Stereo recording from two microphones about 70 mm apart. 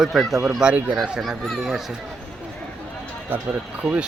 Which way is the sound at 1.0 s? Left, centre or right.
Centre.